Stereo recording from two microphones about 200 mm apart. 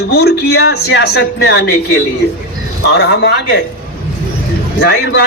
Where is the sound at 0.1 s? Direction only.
55° left (ahead or behind).